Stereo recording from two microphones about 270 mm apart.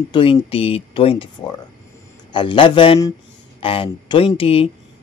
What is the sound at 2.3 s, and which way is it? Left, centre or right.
Speech, centre.